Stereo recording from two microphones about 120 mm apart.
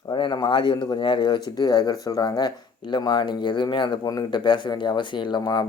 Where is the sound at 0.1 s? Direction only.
40° left (ahead or behind).